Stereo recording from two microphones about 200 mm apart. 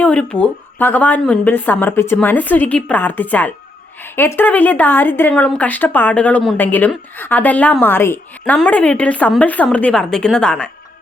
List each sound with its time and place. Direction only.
0.0 s speech: 5° left (ahead or behind)